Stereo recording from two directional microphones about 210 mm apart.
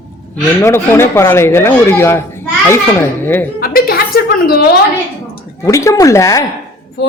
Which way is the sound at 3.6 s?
45° left (ahead or behind).